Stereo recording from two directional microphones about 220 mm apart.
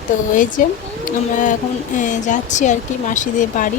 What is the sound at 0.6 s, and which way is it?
Speech, 35° left (ahead or behind).